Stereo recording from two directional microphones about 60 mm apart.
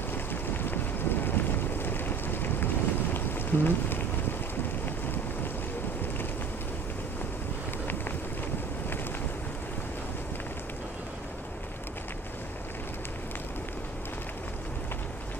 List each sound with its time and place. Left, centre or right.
0.3 s vehicle: left